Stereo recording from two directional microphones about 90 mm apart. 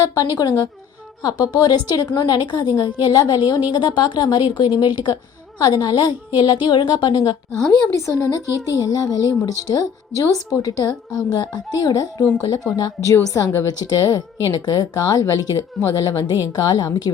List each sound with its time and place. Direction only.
0.1 s a woman's voice: 45° left (ahead or behind)
13.2 s a woman's voice: 40° left (ahead or behind)
13.7 s a woman's voice: 45° left (ahead or behind)